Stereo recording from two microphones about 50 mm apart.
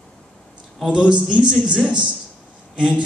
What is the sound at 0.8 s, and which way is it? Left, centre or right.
A man's voice, centre.